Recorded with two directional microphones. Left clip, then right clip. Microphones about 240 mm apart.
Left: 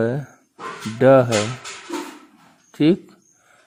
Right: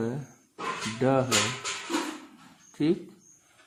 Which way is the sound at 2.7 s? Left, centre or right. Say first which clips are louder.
Left 9 dB; left.